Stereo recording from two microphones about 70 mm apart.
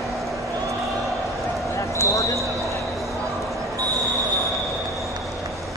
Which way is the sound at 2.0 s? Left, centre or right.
Left.